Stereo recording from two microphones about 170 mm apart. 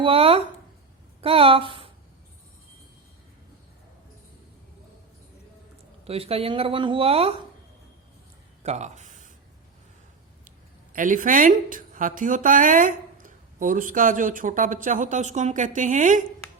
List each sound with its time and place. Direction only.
0.0 s speech: 35° right (ahead or behind)
6.1 s speech: 35° right (ahead or behind)
8.6 s a sound: 45° right (ahead or behind)
10.9 s a woman's voice: 50° right (ahead or behind)